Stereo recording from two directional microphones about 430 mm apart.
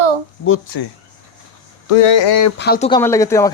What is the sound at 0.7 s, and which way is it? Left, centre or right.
Speech, left.